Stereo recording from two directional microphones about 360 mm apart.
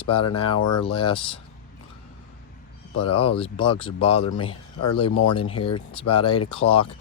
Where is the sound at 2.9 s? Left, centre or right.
Left.